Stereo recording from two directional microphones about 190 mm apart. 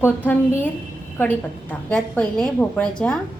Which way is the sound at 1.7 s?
5° left (ahead or behind).